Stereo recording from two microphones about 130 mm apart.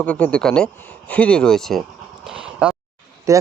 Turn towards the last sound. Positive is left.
turn(degrees=-25)  # may be behind; listen again after turning